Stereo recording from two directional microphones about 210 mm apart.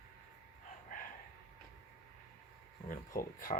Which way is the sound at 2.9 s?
40° left (ahead or behind).